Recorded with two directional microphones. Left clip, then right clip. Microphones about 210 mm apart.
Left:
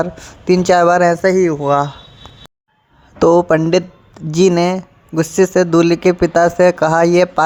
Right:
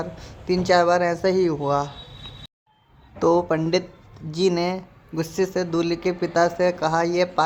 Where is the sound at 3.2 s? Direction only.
35° left (ahead or behind).